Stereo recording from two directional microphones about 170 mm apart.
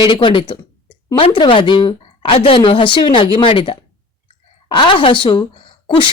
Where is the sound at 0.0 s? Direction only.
30° left (ahead or behind).